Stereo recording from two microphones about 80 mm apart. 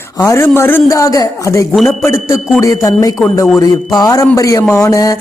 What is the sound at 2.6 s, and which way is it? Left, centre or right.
Speech, left.